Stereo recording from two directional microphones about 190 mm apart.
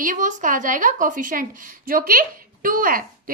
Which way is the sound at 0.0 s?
40° right (ahead or behind).